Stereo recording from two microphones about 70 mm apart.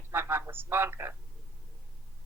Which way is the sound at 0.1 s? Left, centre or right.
Right.